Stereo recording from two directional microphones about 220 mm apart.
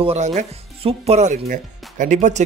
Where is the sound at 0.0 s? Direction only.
30° right (ahead or behind).